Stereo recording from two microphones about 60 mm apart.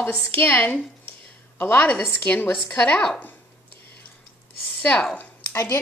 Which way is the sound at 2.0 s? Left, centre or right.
Left.